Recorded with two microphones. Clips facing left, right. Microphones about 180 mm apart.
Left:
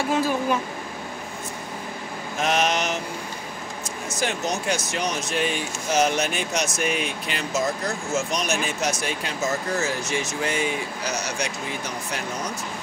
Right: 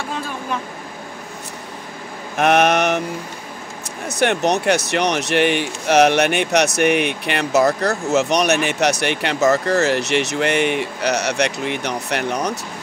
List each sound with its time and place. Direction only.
2.3 s mantra: 60° right (ahead or behind)
4.1 s speech: 65° right (ahead or behind)